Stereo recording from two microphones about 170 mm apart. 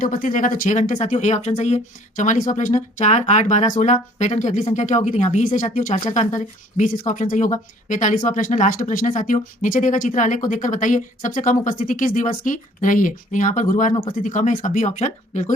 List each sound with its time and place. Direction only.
0.0 s speech: 55° left (ahead or behind)